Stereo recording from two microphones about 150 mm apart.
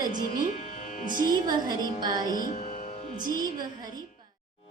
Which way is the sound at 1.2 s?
25° right (ahead or behind).